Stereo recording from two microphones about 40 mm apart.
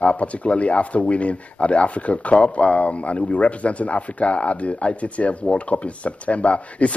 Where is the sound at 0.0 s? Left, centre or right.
Left.